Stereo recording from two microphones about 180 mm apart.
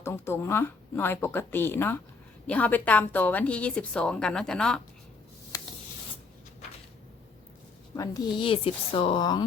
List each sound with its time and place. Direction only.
0.0 s a woman's voice: 15° left (ahead or behind)
5.5 s writing: 15° left (ahead or behind)
7.9 s speech: 20° left (ahead or behind)